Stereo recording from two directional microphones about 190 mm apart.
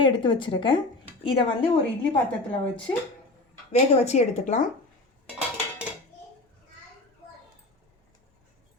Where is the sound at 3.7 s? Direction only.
35° left (ahead or behind).